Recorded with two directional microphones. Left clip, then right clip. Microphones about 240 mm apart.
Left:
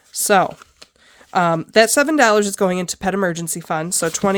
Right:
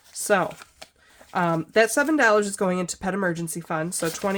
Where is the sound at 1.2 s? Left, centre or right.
Left.